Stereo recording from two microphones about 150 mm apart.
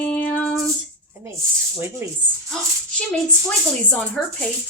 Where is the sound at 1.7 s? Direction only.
15° right (ahead or behind).